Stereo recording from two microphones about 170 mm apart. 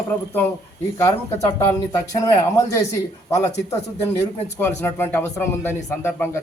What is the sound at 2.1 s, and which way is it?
A man's voice, 20° left (ahead or behind).